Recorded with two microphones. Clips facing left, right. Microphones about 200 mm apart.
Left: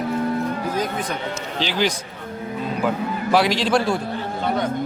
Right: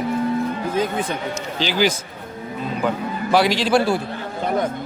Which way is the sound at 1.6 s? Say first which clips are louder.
Right 3 dB; 5° right (ahead or behind).